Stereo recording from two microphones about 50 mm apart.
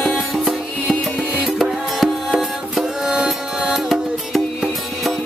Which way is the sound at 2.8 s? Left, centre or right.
Centre.